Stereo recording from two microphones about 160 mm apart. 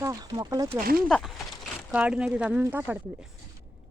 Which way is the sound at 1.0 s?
Centre (ahead or behind).